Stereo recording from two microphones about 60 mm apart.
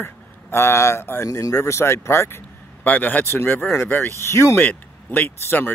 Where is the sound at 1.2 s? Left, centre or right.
Left.